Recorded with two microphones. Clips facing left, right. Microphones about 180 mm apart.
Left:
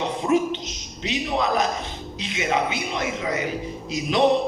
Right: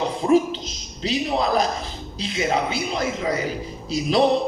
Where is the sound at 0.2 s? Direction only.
35° right (ahead or behind).